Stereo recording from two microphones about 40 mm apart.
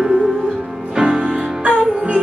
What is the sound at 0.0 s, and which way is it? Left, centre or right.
Music, centre.